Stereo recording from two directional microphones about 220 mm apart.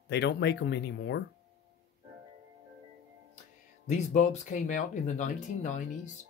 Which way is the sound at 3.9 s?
35° left (ahead or behind).